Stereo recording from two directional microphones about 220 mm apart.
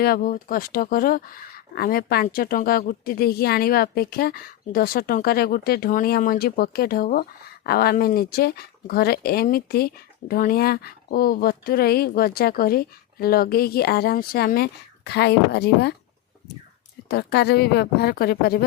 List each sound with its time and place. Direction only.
0.0 s speech: 40° left (ahead or behind)
17.1 s speech: 50° left (ahead or behind)